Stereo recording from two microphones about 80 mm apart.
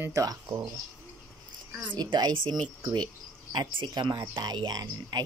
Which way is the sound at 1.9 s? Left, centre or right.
Right.